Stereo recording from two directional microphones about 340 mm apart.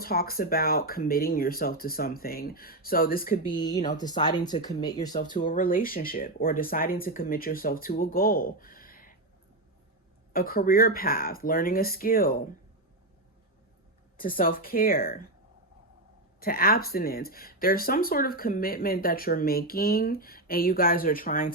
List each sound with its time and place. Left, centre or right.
0.0 s speech: left
3.7 s speech: centre
5.2 s speech: left
10.3 s speech: left
14.2 s speech: left
16.4 s speech: left